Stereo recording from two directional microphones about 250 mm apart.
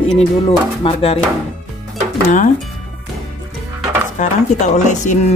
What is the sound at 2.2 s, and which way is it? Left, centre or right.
Music, left.